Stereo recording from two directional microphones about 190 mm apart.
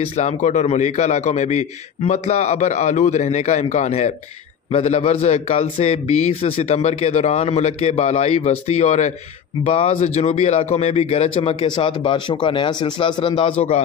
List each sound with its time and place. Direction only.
0.1 s a man's voice: 40° left (ahead or behind)